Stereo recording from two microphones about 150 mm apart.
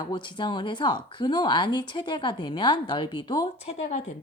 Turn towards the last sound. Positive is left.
turn(degrees=50)  # may be behind; listen again after turning